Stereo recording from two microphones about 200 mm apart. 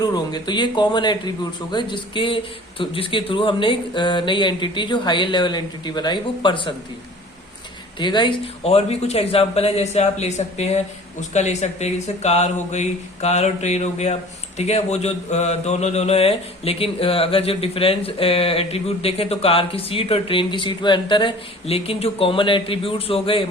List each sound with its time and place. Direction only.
0.0 s speech: 20° left (ahead or behind)
7.9 s speech: 25° left (ahead or behind)